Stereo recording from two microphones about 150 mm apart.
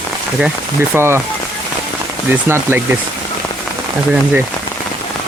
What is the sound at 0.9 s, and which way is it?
Speech, 15° right (ahead or behind).